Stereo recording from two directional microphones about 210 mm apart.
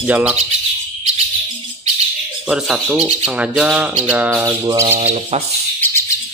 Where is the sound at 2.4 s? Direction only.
5° right (ahead or behind).